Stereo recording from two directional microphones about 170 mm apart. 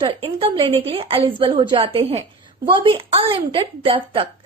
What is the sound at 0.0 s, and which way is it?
A woman's voice, 30° right (ahead or behind).